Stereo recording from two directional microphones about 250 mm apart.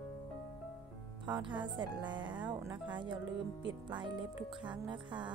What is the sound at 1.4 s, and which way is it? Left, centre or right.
A woman's voice, centre.